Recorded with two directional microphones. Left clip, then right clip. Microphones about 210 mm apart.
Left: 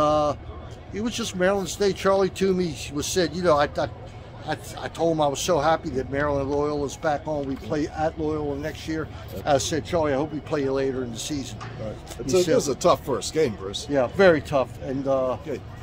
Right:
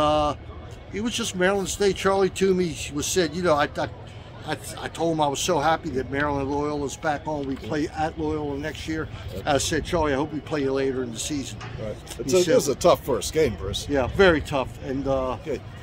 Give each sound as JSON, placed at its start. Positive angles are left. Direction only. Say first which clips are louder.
{"t": 0.0, "sound": "a sound", "louder": "even", "side_deg": 0}
{"t": 0.9, "sound": "speech", "louder": "right 1 dB", "side_deg": -5}
{"t": 12.5, "sound": "speech", "louder": "right 1 dB", "side_deg": -30}
{"t": 13.9, "sound": "speech", "louder": "left 1 dB", "side_deg": 10}